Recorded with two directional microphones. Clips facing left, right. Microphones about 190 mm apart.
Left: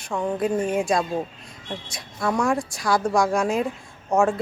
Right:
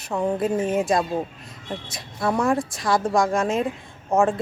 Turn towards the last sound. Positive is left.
turn(degrees=0)  # may be behind; listen again after turning